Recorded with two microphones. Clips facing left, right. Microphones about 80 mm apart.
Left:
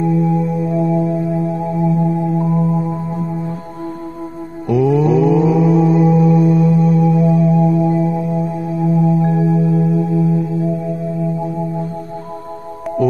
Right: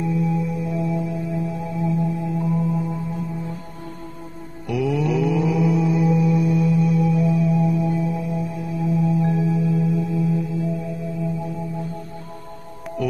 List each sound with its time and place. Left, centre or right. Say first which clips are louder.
0.0 s music: left 7 dB; left
4.6 s mantra: left 9 dB; left
8.9 s singing bowl: left 5 dB; left